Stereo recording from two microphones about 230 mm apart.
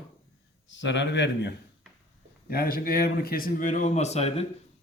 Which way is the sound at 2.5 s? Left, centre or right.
Left.